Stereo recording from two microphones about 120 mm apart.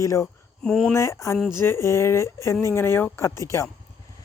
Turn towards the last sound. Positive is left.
turn(degrees=25)  # may be behind; listen again after turning